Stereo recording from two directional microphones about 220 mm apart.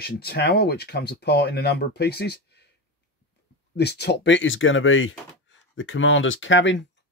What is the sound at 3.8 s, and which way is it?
Speech, 50° left (ahead or behind).